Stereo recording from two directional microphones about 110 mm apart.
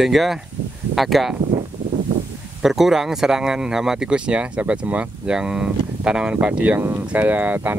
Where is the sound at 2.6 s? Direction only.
5° right (ahead or behind).